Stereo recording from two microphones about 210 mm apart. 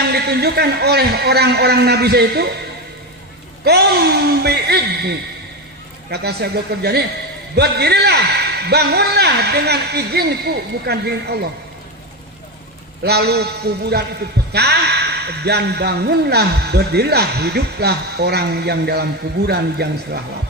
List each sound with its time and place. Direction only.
0.1 s a man's voice: 50° right (ahead or behind)
3.6 s a man's voice: 50° right (ahead or behind)
13.0 s a man's voice: 50° right (ahead or behind)